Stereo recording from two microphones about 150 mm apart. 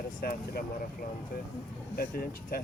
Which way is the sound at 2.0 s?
85° left.